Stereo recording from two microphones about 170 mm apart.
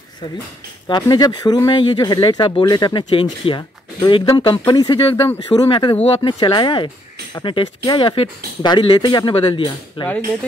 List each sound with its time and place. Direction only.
0.8 s speech: 25° left (ahead or behind)